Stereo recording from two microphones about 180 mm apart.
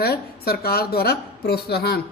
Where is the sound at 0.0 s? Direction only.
60° left (ahead or behind).